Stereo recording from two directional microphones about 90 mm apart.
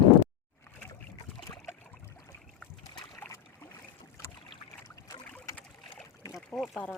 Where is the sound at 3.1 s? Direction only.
30° left (ahead or behind).